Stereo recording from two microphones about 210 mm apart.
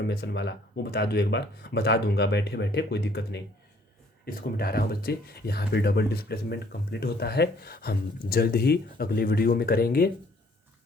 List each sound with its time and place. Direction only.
0.1 s speech: 50° left (ahead or behind)